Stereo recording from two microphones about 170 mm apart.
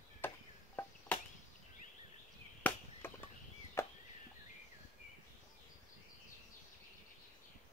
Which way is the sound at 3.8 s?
15° left (ahead or behind).